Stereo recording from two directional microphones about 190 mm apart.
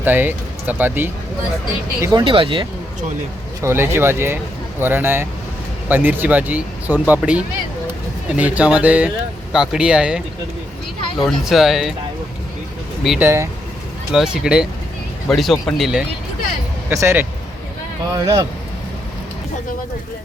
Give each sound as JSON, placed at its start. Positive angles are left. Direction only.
{"t": 0.0, "sound": "speech", "side_deg": -10}
{"t": 2.0, "sound": "speech", "side_deg": -25}
{"t": 3.6, "sound": "speech", "side_deg": -10}
{"t": 11.3, "sound": "speech", "side_deg": 0}
{"t": 13.1, "sound": "speech", "side_deg": -10}
{"t": 16.9, "sound": "speech", "side_deg": -15}